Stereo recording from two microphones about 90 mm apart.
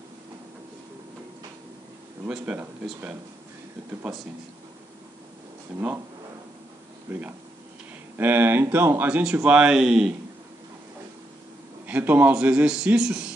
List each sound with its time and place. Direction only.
2.2 s a man's voice: 15° right (ahead or behind)
7.1 s speech: 25° right (ahead or behind)
11.8 s a man's voice: 20° right (ahead or behind)